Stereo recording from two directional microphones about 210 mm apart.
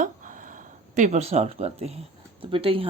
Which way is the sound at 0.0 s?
40° right (ahead or behind).